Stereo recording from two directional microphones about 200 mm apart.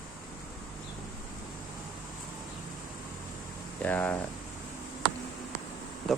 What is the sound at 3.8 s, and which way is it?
Speech, 10° left (ahead or behind).